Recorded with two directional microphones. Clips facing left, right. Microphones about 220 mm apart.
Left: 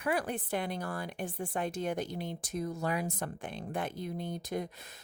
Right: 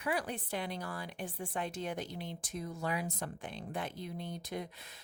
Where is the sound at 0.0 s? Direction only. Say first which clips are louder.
Left 4 dB; 50° left (ahead or behind).